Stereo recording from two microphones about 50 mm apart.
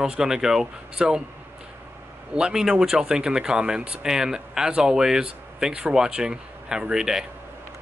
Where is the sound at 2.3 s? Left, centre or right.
Centre.